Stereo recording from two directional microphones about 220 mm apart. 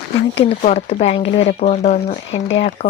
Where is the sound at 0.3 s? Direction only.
25° left (ahead or behind).